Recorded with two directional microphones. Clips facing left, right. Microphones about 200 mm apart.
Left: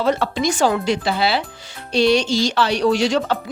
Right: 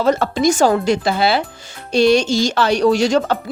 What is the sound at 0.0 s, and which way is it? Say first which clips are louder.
Speech: right 4 dB; 45° right (ahead or behind).